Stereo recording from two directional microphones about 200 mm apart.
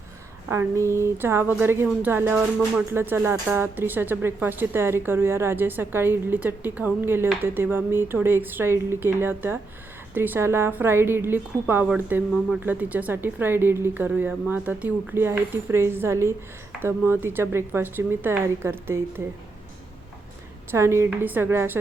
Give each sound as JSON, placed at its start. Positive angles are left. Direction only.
{"t": 0.4, "sound": "a woman's voice", "side_deg": -10}
{"t": 20.7, "sound": "a woman's voice", "side_deg": -15}